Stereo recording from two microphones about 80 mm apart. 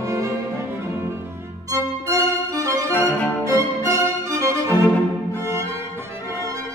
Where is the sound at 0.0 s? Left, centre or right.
Right.